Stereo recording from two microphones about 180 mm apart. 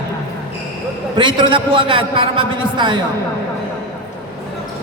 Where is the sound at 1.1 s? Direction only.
25° right (ahead or behind).